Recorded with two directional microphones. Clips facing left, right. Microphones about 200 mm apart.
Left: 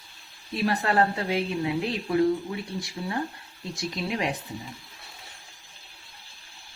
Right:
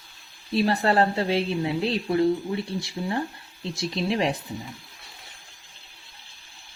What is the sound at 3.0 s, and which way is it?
Speech, 25° right (ahead or behind).